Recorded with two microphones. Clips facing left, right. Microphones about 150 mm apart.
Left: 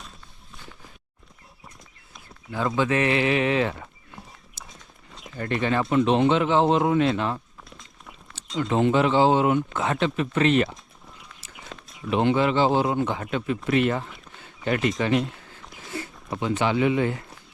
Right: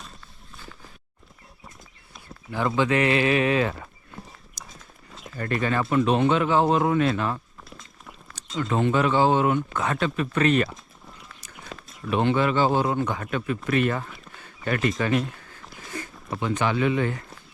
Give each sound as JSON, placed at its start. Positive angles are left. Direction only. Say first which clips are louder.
{"t": 2.5, "sound": "speech", "louder": "right 1 dB", "side_deg": 20}
{"t": 4.3, "sound": "a sound", "louder": "right 1 dB", "side_deg": 0}
{"t": 5.4, "sound": "speech", "louder": "left 1 dB", "side_deg": 25}
{"t": 7.6, "sound": "walk", "louder": "right 1 dB", "side_deg": 0}
{"t": 8.5, "sound": "speech", "louder": "left 2 dB", "side_deg": 25}
{"t": 11.5, "sound": "a sound", "louder": "right 1 dB", "side_deg": 0}
{"t": 12.1, "sound": "speech", "louder": "left 1 dB", "side_deg": 20}
{"t": 16.0, "sound": "a sound", "louder": "left 1 dB", "side_deg": 20}
{"t": 16.6, "sound": "speech", "louder": "left 2 dB", "side_deg": 20}